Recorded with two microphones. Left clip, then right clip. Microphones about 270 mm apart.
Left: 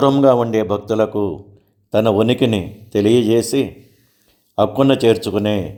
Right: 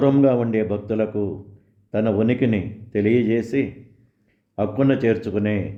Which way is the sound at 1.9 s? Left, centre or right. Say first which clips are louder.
Left 6 dB; left.